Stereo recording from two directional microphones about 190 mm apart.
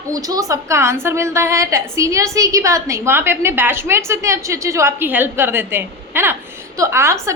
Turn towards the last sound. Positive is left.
turn(degrees=-15)  # may be behind; listen again after turning